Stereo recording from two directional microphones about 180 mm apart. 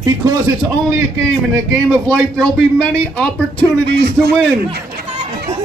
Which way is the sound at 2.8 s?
10° left (ahead or behind).